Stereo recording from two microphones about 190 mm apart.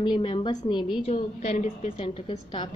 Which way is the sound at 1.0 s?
35° left (ahead or behind).